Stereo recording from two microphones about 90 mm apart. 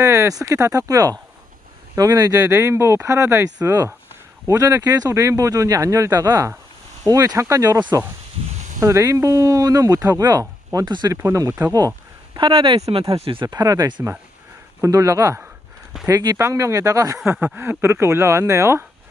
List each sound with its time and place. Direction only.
0.0 s speech: 35° right (ahead or behind)
11.2 s speech: 40° right (ahead or behind)
12.4 s speech: 75° right (ahead or behind)
13.5 s speech: 40° right (ahead or behind)